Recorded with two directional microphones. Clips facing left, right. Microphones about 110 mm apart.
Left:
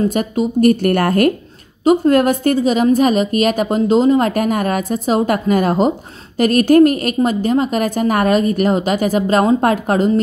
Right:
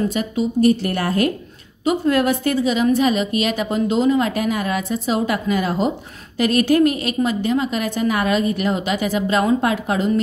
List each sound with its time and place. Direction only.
0.1 s speech: 50° left (ahead or behind)
1.9 s a woman's voice: 45° left (ahead or behind)